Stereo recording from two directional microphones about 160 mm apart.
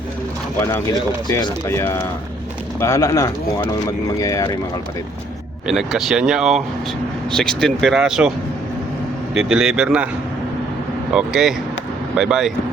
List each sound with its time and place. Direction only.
0.6 s speech: 20° left (ahead or behind)
5.6 s speech: 5° right (ahead or behind)
9.3 s speech: 5° right (ahead or behind)
11.1 s speech: 5° right (ahead or behind)